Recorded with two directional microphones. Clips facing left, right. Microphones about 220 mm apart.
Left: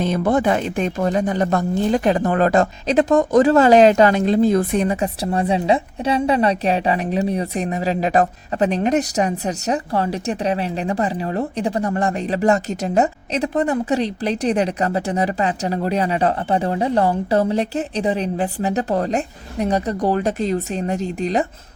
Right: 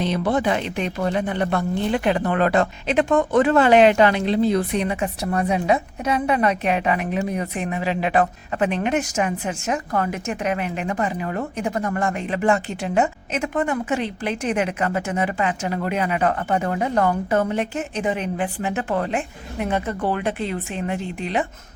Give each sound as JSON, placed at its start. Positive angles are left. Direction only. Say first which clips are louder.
{"t": 0.0, "sound": "speech", "louder": "left 3 dB", "side_deg": 50}